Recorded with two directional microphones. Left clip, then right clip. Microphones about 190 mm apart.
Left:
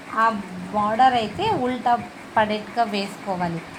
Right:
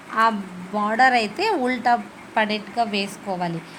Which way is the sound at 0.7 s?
10° right (ahead or behind).